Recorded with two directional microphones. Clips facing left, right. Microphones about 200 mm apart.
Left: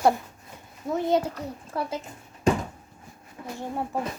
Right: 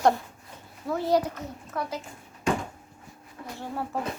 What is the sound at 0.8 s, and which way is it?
A child's voice, 20° left (ahead or behind).